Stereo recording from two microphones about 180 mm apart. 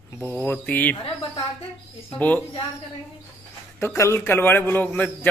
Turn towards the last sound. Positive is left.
turn(degrees=10)  # may be behind; listen again after turning